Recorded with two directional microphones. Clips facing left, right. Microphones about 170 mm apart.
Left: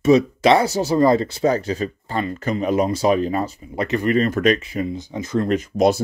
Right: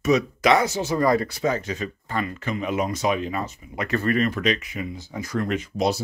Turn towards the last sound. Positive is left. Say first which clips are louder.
# left 6 dB
turn(degrees=45)  # may be behind; listen again after turning